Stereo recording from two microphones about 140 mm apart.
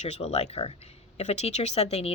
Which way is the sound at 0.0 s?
50° left (ahead or behind).